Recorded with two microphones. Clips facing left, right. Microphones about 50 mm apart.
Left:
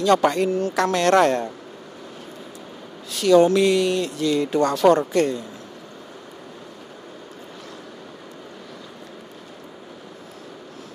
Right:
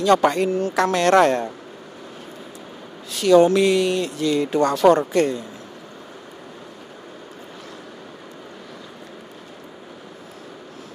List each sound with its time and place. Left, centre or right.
0.0 s speech: right
3.2 s speech: centre